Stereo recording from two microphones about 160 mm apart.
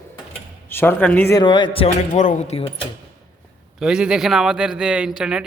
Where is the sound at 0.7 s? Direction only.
15° left (ahead or behind).